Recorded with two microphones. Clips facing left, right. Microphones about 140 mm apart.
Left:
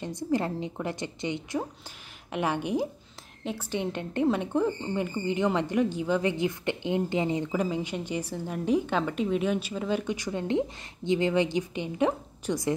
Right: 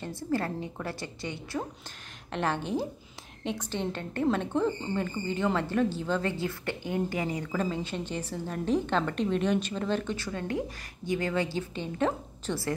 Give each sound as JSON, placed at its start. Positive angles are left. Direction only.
{"t": 0.0, "sound": "a woman's voice", "side_deg": 15}